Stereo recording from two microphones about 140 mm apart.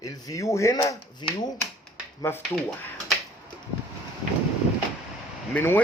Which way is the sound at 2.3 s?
15° left (ahead or behind).